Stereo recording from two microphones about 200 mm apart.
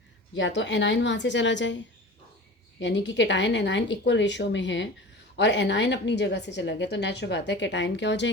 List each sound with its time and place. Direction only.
0.3 s a woman's voice: 65° left (ahead or behind)